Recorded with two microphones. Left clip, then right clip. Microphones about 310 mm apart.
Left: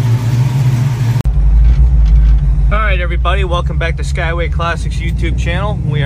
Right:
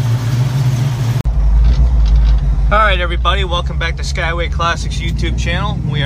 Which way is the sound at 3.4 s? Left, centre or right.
Centre.